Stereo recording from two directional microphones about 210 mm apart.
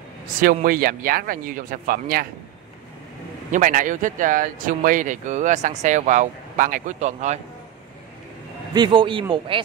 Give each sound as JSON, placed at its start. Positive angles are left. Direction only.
{"t": 0.4, "sound": "speech", "side_deg": -40}
{"t": 3.5, "sound": "speech", "side_deg": -40}
{"t": 8.7, "sound": "speech", "side_deg": -20}